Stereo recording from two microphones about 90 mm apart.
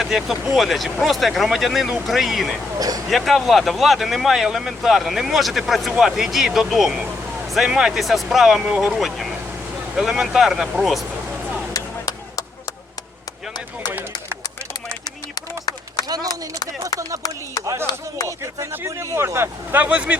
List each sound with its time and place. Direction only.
0.0 s speech: centre (ahead or behind)
2.7 s speech: 45° right (ahead or behind)
3.1 s speech: centre (ahead or behind)
11.7 s chop: 40° left (ahead or behind)
16.0 s a sound: 45° right (ahead or behind)
18.3 s speech: 30° right (ahead or behind)